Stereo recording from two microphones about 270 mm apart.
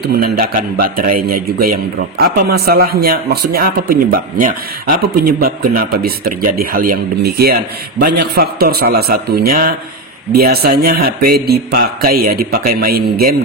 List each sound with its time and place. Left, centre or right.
0.0 s speech: right